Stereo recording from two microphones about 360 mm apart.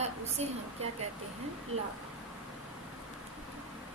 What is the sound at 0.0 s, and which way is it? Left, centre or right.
Speech, centre.